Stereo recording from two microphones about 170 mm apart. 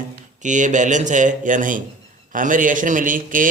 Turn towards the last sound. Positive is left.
turn(degrees=-50)  # may be behind; listen again after turning